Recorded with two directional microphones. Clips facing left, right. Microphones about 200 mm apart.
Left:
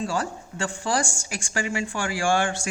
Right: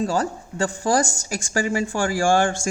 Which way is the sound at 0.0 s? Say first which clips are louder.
Right 5 dB; 40° right (ahead or behind).